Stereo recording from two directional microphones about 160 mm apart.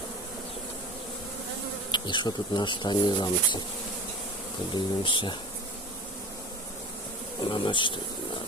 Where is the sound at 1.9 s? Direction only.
30° left (ahead or behind).